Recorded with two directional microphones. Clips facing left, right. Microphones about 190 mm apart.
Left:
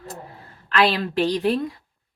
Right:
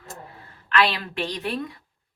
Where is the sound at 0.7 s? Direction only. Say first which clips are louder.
Left 3 dB; 35° left (ahead or behind).